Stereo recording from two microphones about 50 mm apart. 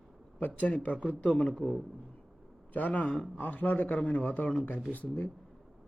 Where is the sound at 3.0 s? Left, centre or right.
Left.